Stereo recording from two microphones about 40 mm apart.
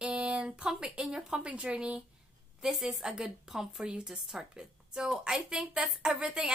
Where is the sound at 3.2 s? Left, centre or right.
Centre.